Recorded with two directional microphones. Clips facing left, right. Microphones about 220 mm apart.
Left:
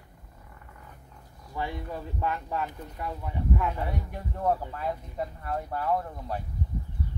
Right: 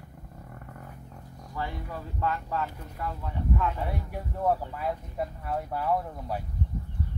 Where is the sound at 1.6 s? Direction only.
20° left (ahead or behind).